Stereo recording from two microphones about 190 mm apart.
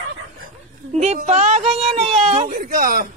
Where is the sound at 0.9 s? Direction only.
35° right (ahead or behind).